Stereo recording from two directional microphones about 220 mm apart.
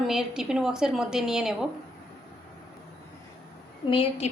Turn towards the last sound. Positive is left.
turn(degrees=25)  # may be behind; listen again after turning